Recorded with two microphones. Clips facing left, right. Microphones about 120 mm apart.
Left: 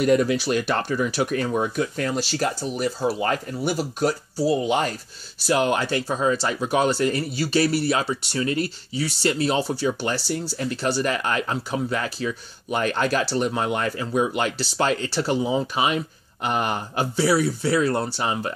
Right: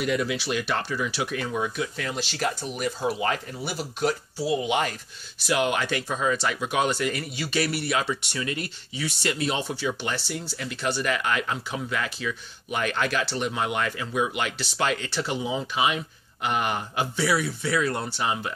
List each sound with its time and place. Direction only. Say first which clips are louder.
0.0 s speech: left 7 dB; 45° left (ahead or behind)